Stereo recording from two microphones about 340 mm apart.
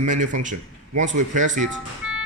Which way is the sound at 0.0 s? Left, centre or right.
Right.